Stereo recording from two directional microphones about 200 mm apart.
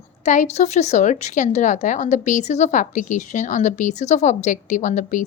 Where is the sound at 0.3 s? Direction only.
35° left (ahead or behind).